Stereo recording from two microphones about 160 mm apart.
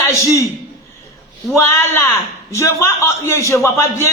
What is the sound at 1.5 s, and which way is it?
A man's voice, 15° left (ahead or behind).